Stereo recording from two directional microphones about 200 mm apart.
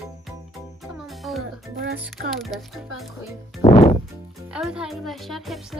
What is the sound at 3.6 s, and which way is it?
Music, 30° left (ahead or behind).